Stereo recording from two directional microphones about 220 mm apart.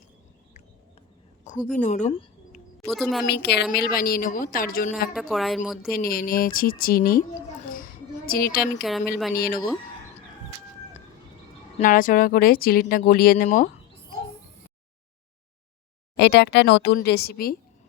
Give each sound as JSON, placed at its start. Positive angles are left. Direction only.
{"t": 1.7, "sound": "speech", "side_deg": 35}
{"t": 2.8, "sound": "speech", "side_deg": 0}
{"t": 3.2, "sound": "a woman's voice", "side_deg": 50}
{"t": 5.1, "sound": "speech", "side_deg": 0}
{"t": 5.9, "sound": "a woman's voice", "side_deg": 40}
{"t": 8.3, "sound": "speech", "side_deg": 45}
{"t": 8.8, "sound": "speech", "side_deg": 0}
{"t": 9.3, "sound": "a woman's voice", "side_deg": 40}
{"t": 11.8, "sound": "a woman's voice", "side_deg": 35}
{"t": 16.1, "sound": "speech", "side_deg": 50}